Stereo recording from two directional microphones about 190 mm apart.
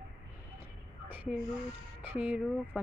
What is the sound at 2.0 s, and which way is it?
Speech, 5° right (ahead or behind).